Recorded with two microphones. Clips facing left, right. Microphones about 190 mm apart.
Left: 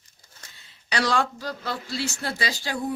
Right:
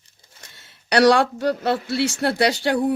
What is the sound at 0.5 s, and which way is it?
Speech, 70° right (ahead or behind).